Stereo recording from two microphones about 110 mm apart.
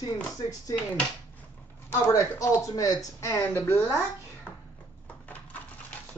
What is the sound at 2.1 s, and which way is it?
Speech, 30° left (ahead or behind).